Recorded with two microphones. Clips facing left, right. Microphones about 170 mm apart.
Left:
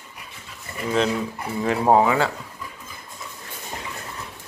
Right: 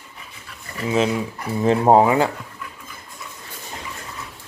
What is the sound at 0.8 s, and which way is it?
Speech, 5° right (ahead or behind).